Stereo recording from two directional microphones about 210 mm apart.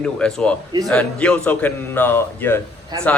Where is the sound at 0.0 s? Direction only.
5° left (ahead or behind).